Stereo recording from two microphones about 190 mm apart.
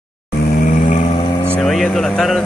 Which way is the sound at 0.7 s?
40° left (ahead or behind).